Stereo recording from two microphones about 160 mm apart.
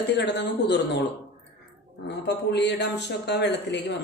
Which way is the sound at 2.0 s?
90° left.